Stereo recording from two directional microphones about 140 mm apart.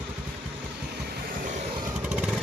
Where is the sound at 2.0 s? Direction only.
5° right (ahead or behind).